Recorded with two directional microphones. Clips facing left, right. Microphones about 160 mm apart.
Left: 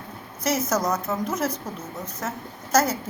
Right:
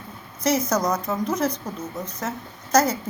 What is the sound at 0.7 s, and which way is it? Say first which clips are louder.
Speech: right 1 dB; 5° left (ahead or behind).